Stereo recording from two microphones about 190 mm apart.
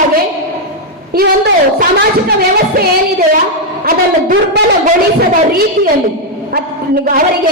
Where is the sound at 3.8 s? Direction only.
50° right (ahead or behind).